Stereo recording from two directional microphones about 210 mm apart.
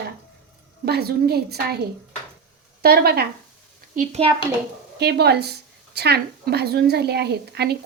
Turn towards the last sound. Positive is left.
turn(degrees=-50)  # may be behind; listen again after turning